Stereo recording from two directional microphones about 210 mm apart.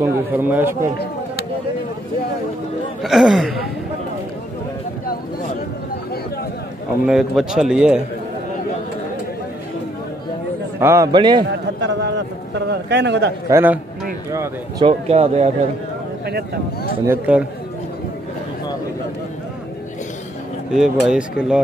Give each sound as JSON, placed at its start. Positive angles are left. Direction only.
{"t": 0.0, "sound": "a man's voice", "side_deg": -10}
{"t": 3.0, "sound": "speech", "side_deg": 0}
{"t": 7.1, "sound": "speech", "side_deg": 0}
{"t": 10.8, "sound": "a man's voice", "side_deg": -15}
{"t": 11.6, "sound": "a man's voice", "side_deg": -55}
{"t": 13.5, "sound": "a man's voice", "side_deg": -10}
{"t": 14.9, "sound": "a man's voice", "side_deg": -30}
{"t": 17.0, "sound": "a man's voice", "side_deg": -10}
{"t": 20.7, "sound": "speech", "side_deg": -5}